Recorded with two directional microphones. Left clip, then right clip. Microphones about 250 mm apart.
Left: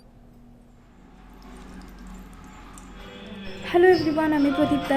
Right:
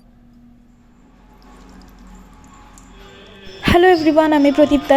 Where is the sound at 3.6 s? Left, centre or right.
Right.